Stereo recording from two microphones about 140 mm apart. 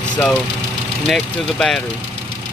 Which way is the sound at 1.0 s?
5° left (ahead or behind).